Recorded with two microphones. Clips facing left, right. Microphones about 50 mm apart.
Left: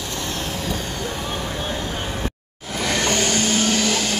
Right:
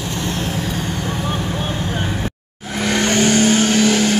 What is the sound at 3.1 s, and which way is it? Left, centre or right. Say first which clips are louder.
Vehicle: right 6 dB; right.